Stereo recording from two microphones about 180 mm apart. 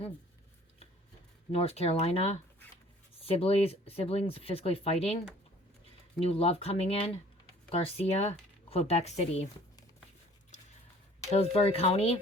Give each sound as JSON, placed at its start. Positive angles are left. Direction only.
{"t": 1.5, "sound": "speech", "side_deg": 35}
{"t": 6.1, "sound": "speech", "side_deg": 30}
{"t": 11.3, "sound": "speech", "side_deg": 35}